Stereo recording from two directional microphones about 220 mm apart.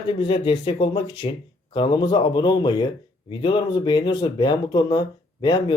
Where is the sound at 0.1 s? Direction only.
20° left (ahead or behind).